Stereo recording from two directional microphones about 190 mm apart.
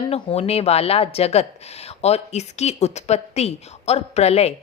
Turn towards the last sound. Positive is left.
turn(degrees=35)  # may be behind; listen again after turning